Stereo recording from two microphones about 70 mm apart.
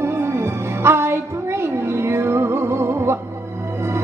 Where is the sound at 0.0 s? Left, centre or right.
Right.